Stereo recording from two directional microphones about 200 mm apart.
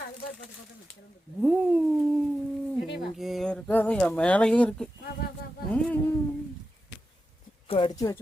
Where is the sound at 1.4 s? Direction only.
5° right (ahead or behind).